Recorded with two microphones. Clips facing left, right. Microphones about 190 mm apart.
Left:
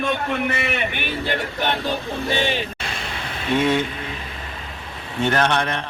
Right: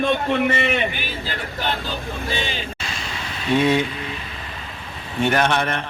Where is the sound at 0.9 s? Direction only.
60° left (ahead or behind).